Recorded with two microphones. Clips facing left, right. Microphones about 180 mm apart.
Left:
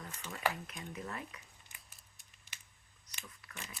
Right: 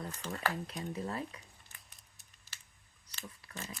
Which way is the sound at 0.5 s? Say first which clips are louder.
Right 6 dB; 35° right (ahead or behind).